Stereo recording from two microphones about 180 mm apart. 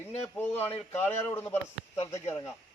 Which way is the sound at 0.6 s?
10° left (ahead or behind).